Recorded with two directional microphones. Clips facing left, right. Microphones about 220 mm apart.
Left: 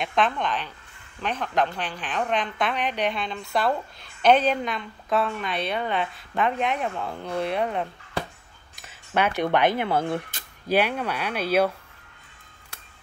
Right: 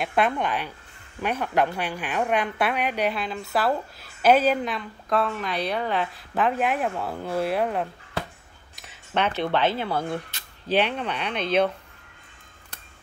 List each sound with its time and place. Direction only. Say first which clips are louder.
0.0 s a woman's voice: right 1 dB; 10° right (ahead or behind)
8.8 s speech: left 1 dB; 10° left (ahead or behind)
10.7 s speech: left 1 dB; 10° left (ahead or behind)